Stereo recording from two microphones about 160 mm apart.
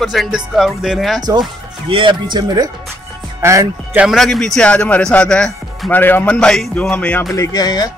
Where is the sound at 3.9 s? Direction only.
Centre (ahead or behind).